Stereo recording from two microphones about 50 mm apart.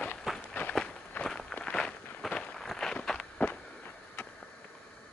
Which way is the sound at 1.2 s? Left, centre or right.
Centre.